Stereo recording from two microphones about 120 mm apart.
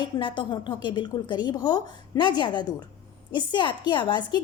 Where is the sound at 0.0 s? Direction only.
40° left (ahead or behind).